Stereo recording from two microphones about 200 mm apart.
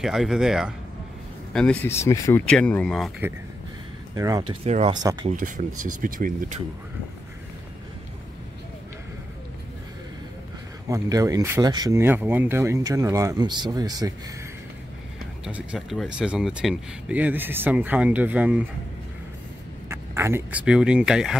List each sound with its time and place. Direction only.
0.0 s speech: centre (ahead or behind)
4.1 s speech: 20° right (ahead or behind)
4.6 s speech: 35° right (ahead or behind)
4.9 s speech: 20° right (ahead or behind)
5.9 s speech: 45° right (ahead or behind)
10.9 s speech: 15° right (ahead or behind)
15.4 s speech: 5° right (ahead or behind)
19.9 s speech: 10° right (ahead or behind)